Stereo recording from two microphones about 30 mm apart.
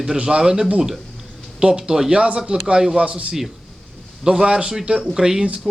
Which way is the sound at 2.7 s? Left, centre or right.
Centre.